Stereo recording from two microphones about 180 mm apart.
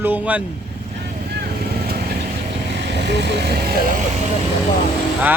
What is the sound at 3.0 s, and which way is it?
Speech, 70° right (ahead or behind).